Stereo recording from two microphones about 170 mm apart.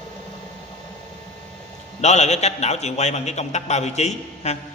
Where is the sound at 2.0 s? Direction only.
40° left (ahead or behind).